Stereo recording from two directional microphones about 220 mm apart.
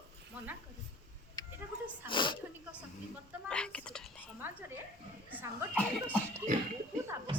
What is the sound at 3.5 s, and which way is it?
Speech, 5° left (ahead or behind).